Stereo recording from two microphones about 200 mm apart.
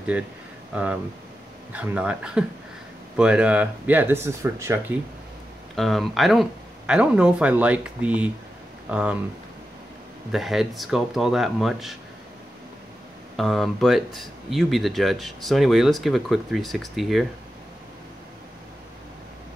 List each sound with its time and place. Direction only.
1.7 s speech: 5° right (ahead or behind)
5.8 s speech: centre (ahead or behind)
10.3 s speech: centre (ahead or behind)
13.4 s speech: centre (ahead or behind)